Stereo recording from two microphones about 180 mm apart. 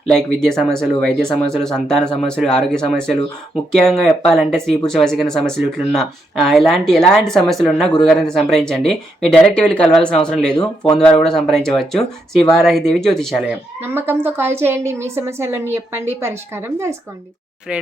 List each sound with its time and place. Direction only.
0.1 s speech: 5° left (ahead or behind)
13.8 s a woman's voice: 15° right (ahead or behind)